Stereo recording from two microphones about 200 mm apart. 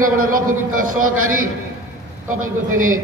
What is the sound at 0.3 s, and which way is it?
Speech, 40° right (ahead or behind).